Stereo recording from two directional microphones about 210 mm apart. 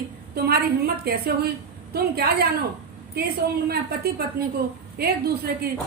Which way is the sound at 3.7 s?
50° right (ahead or behind).